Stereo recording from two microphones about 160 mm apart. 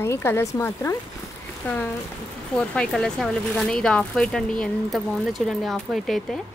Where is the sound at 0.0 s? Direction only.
15° left (ahead or behind).